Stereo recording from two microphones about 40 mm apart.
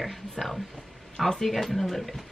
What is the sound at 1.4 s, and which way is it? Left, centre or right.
Speech, centre.